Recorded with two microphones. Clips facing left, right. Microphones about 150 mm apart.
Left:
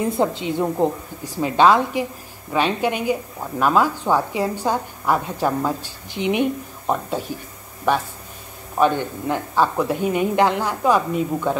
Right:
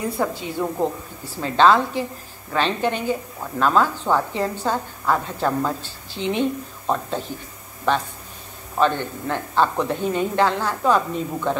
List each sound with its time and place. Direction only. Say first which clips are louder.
0.2 s a woman's voice: left 2 dB; 20° left (ahead or behind)